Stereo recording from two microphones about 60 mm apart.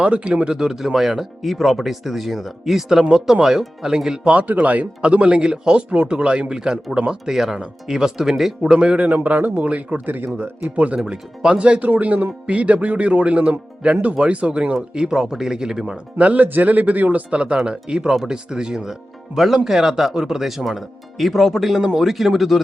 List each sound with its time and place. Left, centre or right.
0.0 s speech: centre; by 10.7 s right
10.8 s speech: right
16.1 s speech: right; by 22.6 s centre